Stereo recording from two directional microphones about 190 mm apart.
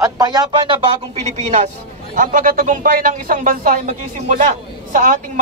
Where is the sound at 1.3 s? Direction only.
40° right (ahead or behind).